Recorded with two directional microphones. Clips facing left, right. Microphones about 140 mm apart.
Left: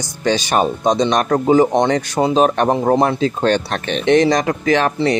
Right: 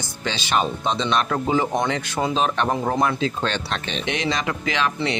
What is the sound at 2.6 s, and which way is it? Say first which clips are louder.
A man's voice: left 7 dB; 35° left (ahead or behind).